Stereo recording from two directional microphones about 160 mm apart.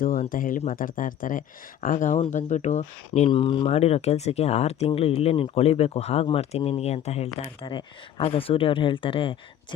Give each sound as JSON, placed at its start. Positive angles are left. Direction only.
{"t": 0.0, "sound": "speech", "side_deg": 60}
{"t": 7.3, "sound": "speech", "side_deg": 30}